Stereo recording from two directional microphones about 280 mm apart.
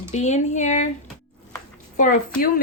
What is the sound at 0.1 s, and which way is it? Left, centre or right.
Speech, left.